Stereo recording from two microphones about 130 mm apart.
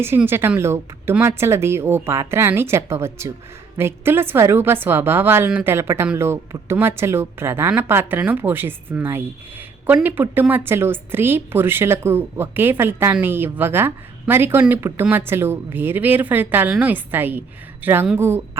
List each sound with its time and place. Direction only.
0.3 s a woman's voice: 15° right (ahead or behind)